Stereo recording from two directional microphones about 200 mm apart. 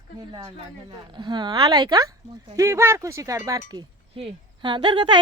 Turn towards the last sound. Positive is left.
turn(degrees=-25)  # may be behind; listen again after turning